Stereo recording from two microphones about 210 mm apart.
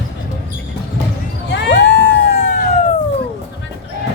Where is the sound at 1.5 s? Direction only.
55° left (ahead or behind).